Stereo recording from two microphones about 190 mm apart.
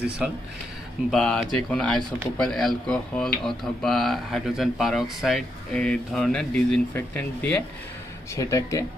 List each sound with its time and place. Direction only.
1.1 s speech: 5° left (ahead or behind)